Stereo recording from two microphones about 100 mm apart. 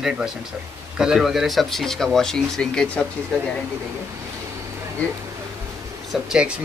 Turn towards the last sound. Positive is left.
turn(degrees=-5)  # may be behind; listen again after turning